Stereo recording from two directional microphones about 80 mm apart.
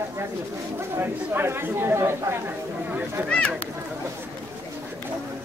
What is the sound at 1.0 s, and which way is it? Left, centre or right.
Speech, right.